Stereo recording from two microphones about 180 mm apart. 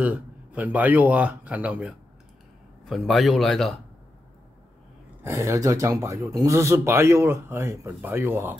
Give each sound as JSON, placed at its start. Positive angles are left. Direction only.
{"t": 0.0, "sound": "speech", "side_deg": -10}
{"t": 5.2, "sound": "speech", "side_deg": -15}